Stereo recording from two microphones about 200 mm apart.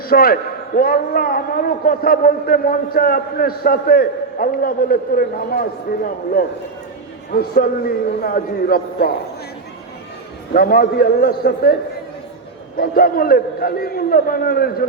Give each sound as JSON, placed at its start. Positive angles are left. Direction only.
{"t": 0.1, "sound": "a man's voice", "side_deg": 50}
{"t": 7.3, "sound": "a man's voice", "side_deg": 45}
{"t": 10.5, "sound": "a man's voice", "side_deg": 45}